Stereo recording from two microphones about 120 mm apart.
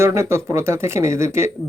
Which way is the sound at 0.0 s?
25° right (ahead or behind).